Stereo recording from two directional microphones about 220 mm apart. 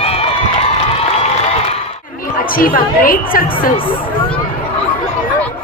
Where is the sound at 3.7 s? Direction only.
25° left (ahead or behind).